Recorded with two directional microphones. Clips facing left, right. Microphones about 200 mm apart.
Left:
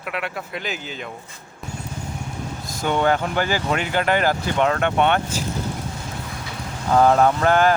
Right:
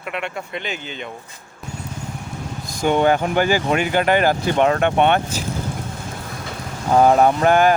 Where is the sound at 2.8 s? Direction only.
15° right (ahead or behind).